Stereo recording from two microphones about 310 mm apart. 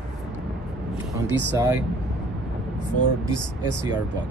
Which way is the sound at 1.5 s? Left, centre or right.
Centre.